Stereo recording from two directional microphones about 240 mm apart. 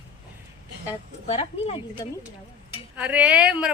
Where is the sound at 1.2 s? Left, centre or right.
Left.